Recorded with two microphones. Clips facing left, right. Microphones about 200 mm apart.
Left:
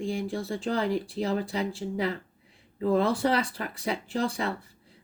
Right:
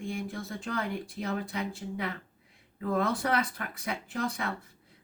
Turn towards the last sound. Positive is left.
turn(degrees=30)  # may be behind; listen again after turning